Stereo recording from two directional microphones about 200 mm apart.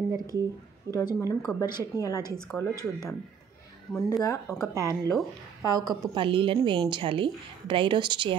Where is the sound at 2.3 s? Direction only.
Centre (ahead or behind).